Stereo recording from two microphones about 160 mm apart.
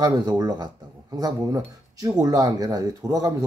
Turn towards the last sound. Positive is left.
turn(degrees=-20)  # may be behind; listen again after turning